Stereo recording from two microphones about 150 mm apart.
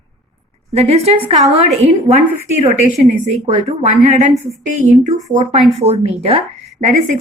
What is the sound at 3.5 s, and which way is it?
Speech, 55° right (ahead or behind).